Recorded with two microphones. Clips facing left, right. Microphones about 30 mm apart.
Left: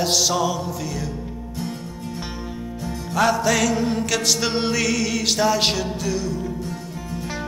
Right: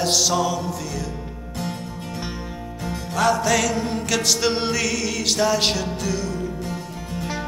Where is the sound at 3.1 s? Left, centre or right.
Centre.